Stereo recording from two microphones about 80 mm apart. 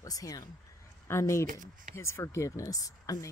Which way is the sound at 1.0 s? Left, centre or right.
Left.